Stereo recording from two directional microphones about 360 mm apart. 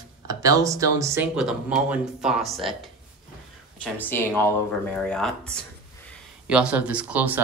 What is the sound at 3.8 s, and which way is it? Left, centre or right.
Speech, centre.